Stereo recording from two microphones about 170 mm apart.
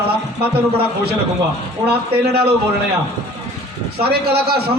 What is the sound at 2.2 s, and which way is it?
Speech, 65° right (ahead or behind).